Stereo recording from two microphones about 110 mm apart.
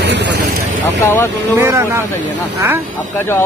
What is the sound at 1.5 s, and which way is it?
Speech, 25° right (ahead or behind).